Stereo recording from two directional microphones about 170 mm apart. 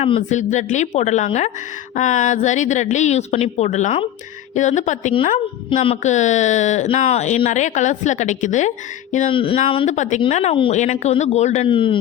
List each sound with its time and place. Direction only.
0.0 s a woman's voice: 40° left (ahead or behind)
9.3 s a woman's voice: 30° left (ahead or behind)
11.7 s a man's voice: 30° left (ahead or behind)